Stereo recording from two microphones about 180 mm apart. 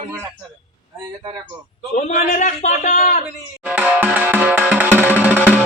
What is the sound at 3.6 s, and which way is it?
Music, 5° right (ahead or behind).